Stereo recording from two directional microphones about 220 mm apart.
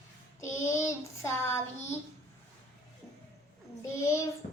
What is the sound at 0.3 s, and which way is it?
Child singing, 15° left (ahead or behind).